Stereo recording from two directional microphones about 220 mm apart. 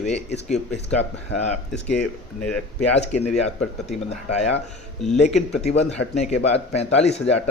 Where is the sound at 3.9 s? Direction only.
30° left (ahead or behind).